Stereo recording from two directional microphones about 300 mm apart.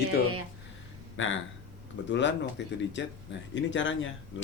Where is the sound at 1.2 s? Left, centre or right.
Left.